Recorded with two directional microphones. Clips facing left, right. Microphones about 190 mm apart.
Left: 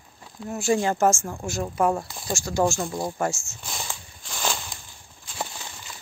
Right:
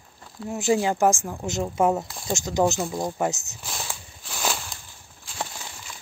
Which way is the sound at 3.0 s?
15° right (ahead or behind).